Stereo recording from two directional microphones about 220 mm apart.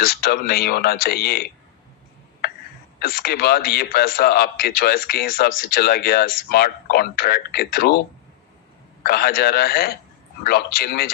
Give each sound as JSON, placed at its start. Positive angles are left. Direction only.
{"t": 0.0, "sound": "a man's voice", "side_deg": 45}
{"t": 3.0, "sound": "a man's voice", "side_deg": 45}
{"t": 9.0, "sound": "a man's voice", "side_deg": 45}